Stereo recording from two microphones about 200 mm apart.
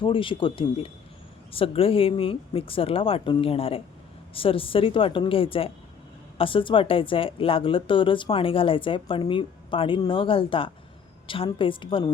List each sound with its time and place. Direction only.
0.0 s a woman's voice: 25° left (ahead or behind)